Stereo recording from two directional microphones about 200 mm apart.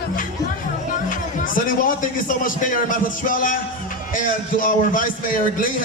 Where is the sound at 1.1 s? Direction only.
45° left (ahead or behind).